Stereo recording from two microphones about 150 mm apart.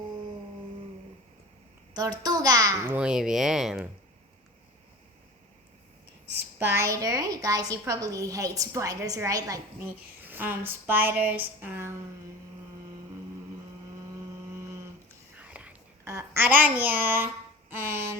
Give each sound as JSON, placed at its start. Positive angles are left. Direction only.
{"t": 1.9, "sound": "a child's voice", "side_deg": -25}
{"t": 6.3, "sound": "a woman's voice", "side_deg": -15}
{"t": 15.4, "sound": "whispering", "side_deg": -10}
{"t": 17.7, "sound": "a child's voice", "side_deg": -15}